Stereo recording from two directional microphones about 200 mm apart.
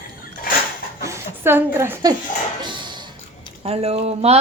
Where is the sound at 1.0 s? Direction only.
10° right (ahead or behind).